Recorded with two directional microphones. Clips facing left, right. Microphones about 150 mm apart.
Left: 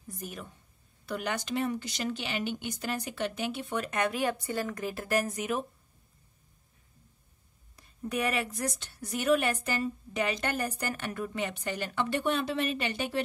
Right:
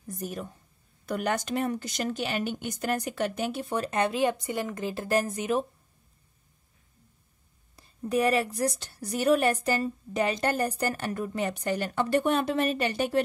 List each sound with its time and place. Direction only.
0.2 s a woman's voice: 40° right (ahead or behind)
7.7 s a woman's voice: 30° right (ahead or behind)